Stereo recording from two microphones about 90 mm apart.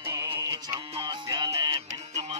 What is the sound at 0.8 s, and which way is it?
Music, 70° right (ahead or behind).